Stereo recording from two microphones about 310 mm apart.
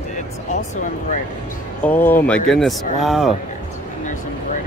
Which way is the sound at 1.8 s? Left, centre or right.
Centre.